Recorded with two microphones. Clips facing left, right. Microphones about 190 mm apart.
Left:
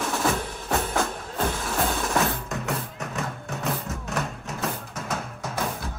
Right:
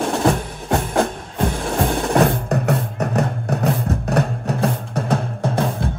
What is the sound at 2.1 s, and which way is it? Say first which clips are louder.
Music: right 9 dB; 65° right (ahead or behind).